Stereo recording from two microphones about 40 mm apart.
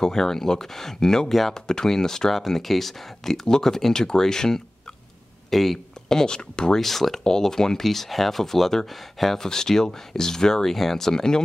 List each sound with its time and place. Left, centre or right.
0.0 s speech: centre
3.4 s speech: centre
5.5 s speech: centre
6.0 s speech: centre
6.8 s speech: centre